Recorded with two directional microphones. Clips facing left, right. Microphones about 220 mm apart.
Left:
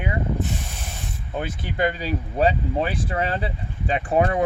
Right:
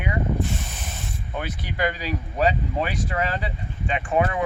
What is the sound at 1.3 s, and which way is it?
Speech, 30° left (ahead or behind).